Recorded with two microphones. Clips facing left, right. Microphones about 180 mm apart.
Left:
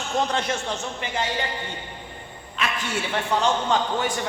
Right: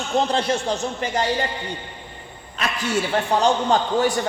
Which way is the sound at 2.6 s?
40° right (ahead or behind).